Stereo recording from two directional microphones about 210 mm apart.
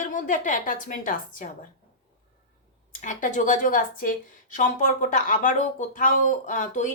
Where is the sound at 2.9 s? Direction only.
35° left (ahead or behind).